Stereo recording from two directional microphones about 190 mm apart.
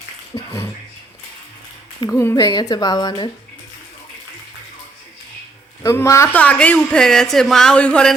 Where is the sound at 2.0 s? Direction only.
15° left (ahead or behind).